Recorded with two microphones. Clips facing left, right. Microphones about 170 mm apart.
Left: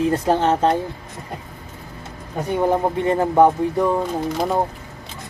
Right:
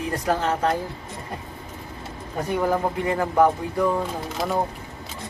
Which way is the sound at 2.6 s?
25° left (ahead or behind).